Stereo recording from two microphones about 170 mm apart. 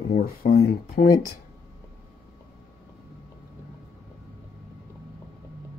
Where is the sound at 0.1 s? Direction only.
60° left (ahead or behind).